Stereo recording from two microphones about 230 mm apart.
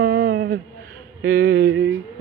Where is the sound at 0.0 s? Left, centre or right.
Right.